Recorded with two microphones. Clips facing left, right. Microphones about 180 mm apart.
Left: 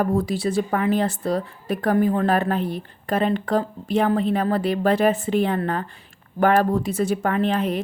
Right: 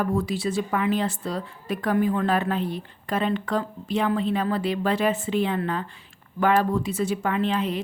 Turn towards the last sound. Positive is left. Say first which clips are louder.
# left 3 dB
turn(degrees=45)  # may be behind; listen again after turning